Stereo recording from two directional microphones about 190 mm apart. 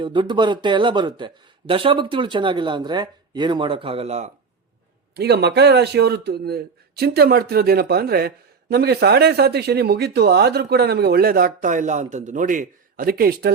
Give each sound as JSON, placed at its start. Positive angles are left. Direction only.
{"t": 0.0, "sound": "speech", "side_deg": -25}
{"t": 5.1, "sound": "speech", "side_deg": -60}